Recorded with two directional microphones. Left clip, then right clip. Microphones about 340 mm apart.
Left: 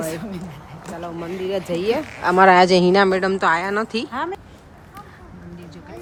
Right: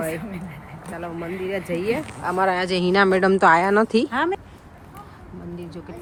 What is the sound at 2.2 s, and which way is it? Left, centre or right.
Speech, left.